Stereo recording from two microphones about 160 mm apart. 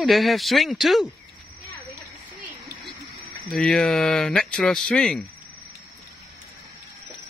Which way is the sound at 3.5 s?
5° left (ahead or behind).